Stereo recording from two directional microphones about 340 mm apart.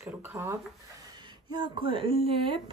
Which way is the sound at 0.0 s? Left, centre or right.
Centre.